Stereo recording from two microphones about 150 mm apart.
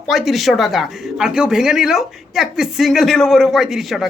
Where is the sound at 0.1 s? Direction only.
Centre (ahead or behind).